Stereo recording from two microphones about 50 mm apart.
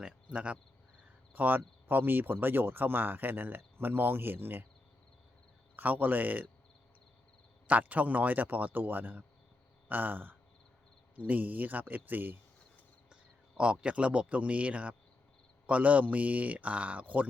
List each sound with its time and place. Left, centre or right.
0.3 s speech: right
1.3 s speech: right
5.7 s speech: right
7.7 s speech: right
13.6 s speech: right